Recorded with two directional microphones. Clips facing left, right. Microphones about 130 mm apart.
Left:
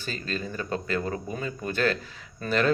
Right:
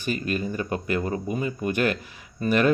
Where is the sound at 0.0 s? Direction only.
15° right (ahead or behind).